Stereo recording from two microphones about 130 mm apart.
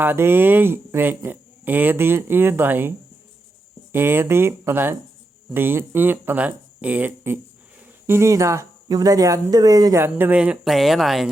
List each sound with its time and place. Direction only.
0.0 s speech: 15° right (ahead or behind)
3.9 s speech: 15° right (ahead or behind)
10.0 s speech: 15° right (ahead or behind)